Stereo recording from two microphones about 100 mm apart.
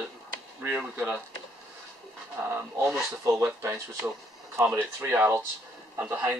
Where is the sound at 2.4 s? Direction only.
25° right (ahead or behind).